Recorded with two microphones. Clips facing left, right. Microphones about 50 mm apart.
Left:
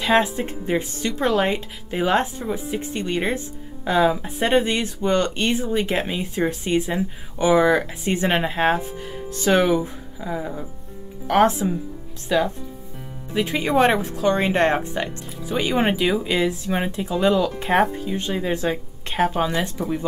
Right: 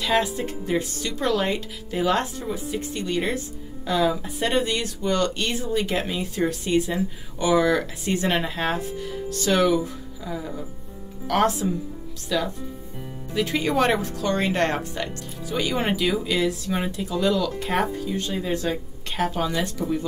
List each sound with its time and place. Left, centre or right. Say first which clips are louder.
0.0 s speech: left 4 dB; left